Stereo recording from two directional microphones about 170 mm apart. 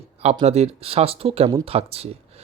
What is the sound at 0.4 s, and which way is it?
Speech, 40° right (ahead or behind).